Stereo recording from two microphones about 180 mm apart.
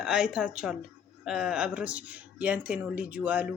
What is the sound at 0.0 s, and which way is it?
A woman's voice, 5° right (ahead or behind).